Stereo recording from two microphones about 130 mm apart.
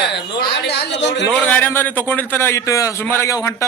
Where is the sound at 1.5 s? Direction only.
15° left (ahead or behind).